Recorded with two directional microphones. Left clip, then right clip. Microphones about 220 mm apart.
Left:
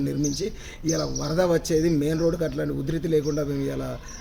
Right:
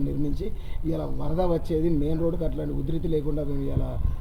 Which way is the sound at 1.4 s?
15° left (ahead or behind).